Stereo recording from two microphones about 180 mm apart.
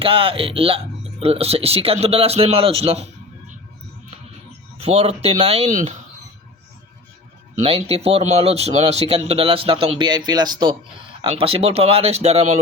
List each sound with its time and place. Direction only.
0.0 s speech: 30° right (ahead or behind)
4.8 s speech: 35° right (ahead or behind)
7.5 s speech: 35° right (ahead or behind)